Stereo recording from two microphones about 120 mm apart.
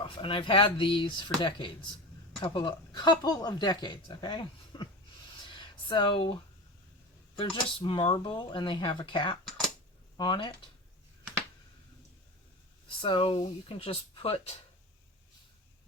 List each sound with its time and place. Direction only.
0.0 s speech: 45° left (ahead or behind)
5.5 s a sound: 40° left (ahead or behind)
7.3 s speech: 45° left (ahead or behind)
13.0 s speech: 45° left (ahead or behind)